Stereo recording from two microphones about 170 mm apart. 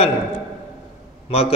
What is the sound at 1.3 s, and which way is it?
Speech, 35° left (ahead or behind).